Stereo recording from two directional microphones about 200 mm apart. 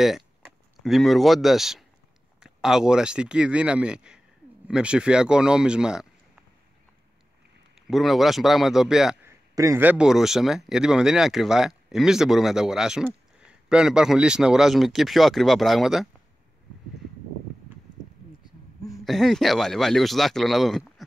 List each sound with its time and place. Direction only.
0.8 s speech: centre (ahead or behind)
7.7 s speech: centre (ahead or behind)
19.0 s speech: centre (ahead or behind)